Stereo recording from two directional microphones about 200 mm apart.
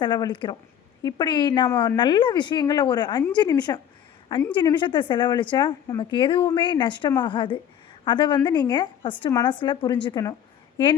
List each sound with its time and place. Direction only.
0.0 s a woman's voice: 20° left (ahead or behind)